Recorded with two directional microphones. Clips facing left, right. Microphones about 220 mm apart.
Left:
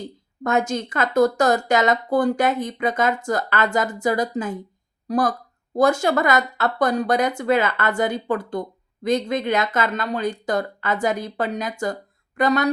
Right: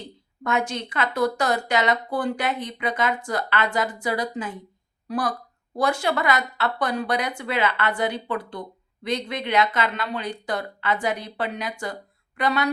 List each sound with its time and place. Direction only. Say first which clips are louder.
0.4 s speech: left 4 dB; 45° left (ahead or behind)